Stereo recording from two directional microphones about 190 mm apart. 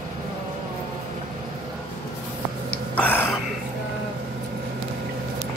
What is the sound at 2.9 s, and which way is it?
Throat clearing, 10° left (ahead or behind).